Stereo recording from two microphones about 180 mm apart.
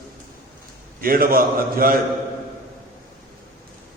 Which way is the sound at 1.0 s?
55° right (ahead or behind).